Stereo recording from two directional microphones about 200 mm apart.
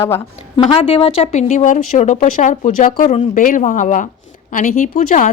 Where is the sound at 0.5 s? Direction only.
25° left (ahead or behind).